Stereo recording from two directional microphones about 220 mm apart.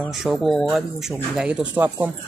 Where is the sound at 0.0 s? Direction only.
Centre (ahead or behind).